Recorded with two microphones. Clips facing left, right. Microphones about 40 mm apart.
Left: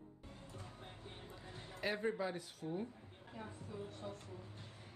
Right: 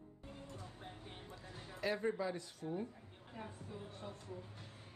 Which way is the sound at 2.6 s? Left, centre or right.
Centre.